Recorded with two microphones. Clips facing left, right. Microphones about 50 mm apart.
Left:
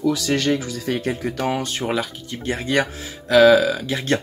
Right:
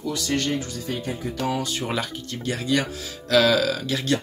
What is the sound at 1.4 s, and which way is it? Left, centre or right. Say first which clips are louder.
Speech: left 2 dB; left.